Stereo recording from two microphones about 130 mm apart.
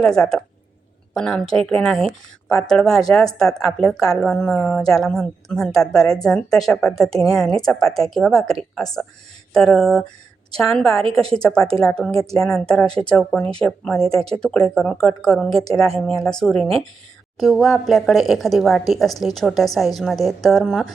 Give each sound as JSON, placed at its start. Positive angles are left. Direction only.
{"t": 0.0, "sound": "speech", "side_deg": 5}
{"t": 12.1, "sound": "speech", "side_deg": -50}
{"t": 12.4, "sound": "speech", "side_deg": 5}